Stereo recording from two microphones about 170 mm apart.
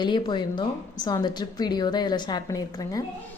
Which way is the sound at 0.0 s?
25° left (ahead or behind).